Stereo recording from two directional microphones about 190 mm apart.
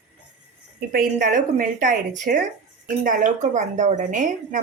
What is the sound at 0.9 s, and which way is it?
A woman's voice, 50° right (ahead or behind).